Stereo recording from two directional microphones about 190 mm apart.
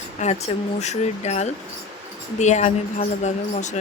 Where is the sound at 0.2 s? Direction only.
35° left (ahead or behind).